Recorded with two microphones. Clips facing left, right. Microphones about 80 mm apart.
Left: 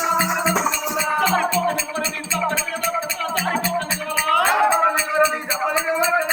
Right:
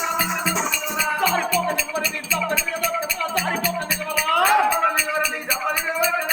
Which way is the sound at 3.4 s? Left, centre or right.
Left.